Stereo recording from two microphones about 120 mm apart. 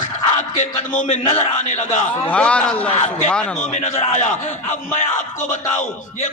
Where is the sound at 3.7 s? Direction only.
90° left.